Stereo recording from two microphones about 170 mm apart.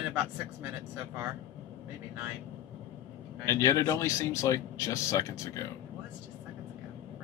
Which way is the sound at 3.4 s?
20° left (ahead or behind).